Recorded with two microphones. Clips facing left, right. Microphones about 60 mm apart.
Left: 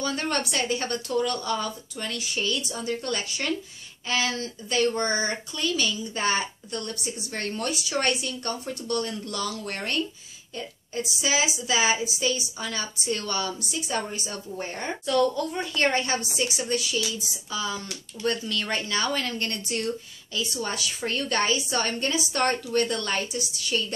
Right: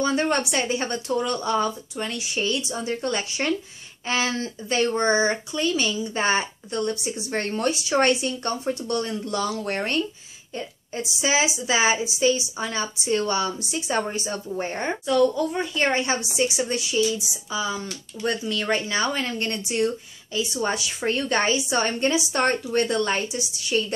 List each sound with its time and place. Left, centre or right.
0.0 s speech: right
15.0 s a woman's voice: centre
20.6 s speech: right